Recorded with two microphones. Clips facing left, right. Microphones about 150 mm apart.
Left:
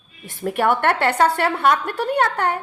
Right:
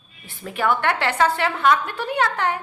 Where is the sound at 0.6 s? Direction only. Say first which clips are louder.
Left 2 dB; 50° left (ahead or behind).